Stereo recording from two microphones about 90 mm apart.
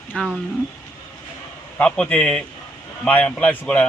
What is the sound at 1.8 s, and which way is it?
Speech, 15° left (ahead or behind).